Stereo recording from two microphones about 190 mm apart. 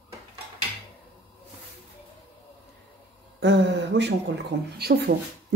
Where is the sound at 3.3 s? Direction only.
65° right (ahead or behind).